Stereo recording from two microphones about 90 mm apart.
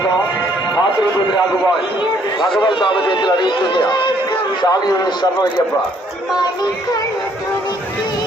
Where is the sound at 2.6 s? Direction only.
60° left (ahead or behind).